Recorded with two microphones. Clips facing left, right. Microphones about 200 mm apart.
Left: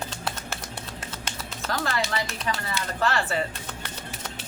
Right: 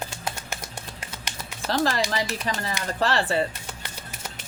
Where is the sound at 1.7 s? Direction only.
30° right (ahead or behind).